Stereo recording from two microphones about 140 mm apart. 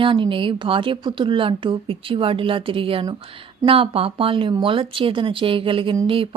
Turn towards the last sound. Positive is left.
turn(degrees=-40)  # may be behind; listen again after turning